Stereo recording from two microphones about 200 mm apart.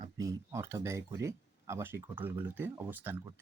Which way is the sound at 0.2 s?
15° right (ahead or behind).